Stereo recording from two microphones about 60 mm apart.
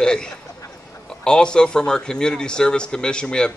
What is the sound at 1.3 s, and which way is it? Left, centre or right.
A man's voice, centre.